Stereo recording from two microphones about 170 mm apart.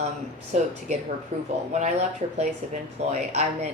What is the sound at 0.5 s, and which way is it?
Speech, 45° right (ahead or behind).